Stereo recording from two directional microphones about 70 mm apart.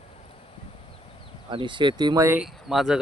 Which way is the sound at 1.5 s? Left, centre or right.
Right.